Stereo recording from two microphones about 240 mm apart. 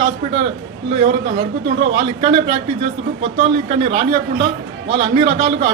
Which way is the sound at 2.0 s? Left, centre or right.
Right.